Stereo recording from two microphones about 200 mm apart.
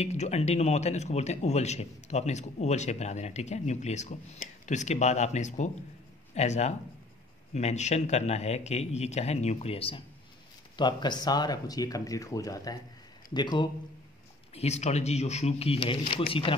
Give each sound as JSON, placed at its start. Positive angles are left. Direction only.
{"t": 0.0, "sound": "speech", "side_deg": 35}
{"t": 14.5, "sound": "speech", "side_deg": 30}